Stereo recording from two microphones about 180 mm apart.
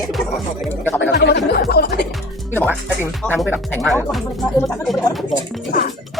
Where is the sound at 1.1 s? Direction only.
65° left (ahead or behind).